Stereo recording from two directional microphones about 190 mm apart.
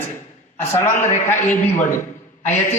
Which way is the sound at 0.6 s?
15° left (ahead or behind).